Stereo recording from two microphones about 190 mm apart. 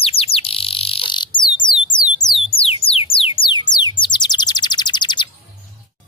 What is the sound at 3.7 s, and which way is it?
Bird, 25° left (ahead or behind).